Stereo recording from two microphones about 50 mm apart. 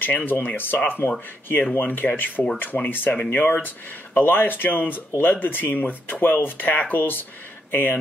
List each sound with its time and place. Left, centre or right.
0.0 s speech: left